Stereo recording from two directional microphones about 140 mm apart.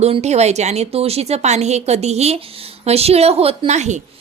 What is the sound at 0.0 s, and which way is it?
A woman's voice, 50° right (ahead or behind).